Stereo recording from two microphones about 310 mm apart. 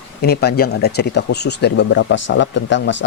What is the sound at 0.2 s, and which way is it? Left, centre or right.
Speech, left.